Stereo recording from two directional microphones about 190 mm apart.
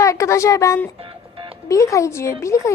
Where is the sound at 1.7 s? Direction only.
15° left (ahead or behind).